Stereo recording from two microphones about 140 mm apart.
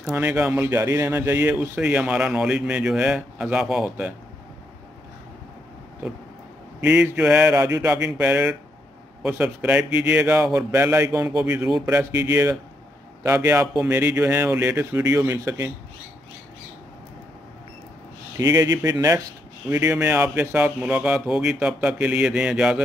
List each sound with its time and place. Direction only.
0.1 s speech: 15° right (ahead or behind)
6.8 s speech: 10° right (ahead or behind)
18.4 s speech: 25° right (ahead or behind); by 22.8 s 5° right (ahead or behind)